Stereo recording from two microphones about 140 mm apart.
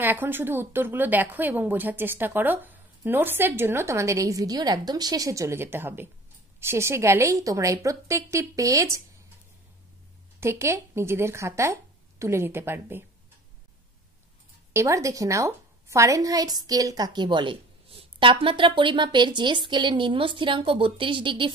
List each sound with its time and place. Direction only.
0.0 s a woman's voice: 15° right (ahead or behind)
10.4 s speech: 20° right (ahead or behind)
14.7 s a woman's voice: 20° right (ahead or behind); by 21.5 s 35° right (ahead or behind)